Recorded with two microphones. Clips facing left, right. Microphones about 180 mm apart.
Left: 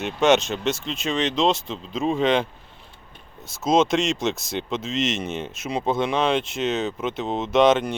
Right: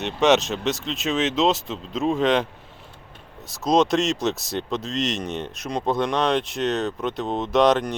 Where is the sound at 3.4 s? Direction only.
Centre (ahead or behind).